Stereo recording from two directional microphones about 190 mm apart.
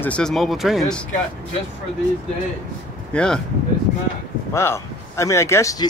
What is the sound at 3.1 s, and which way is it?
Speech, 5° left (ahead or behind).